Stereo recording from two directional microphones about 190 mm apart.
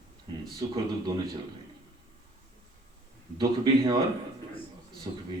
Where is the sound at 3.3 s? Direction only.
20° right (ahead or behind).